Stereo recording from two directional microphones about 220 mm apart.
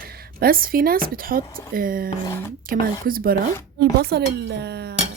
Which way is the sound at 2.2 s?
10° left (ahead or behind).